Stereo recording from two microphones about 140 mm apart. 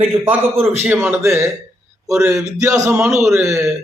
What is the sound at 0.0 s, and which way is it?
A man's voice, 15° right (ahead or behind).